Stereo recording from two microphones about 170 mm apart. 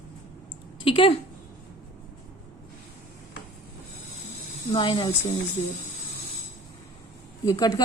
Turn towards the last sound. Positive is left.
turn(degrees=20)  # may be behind; listen again after turning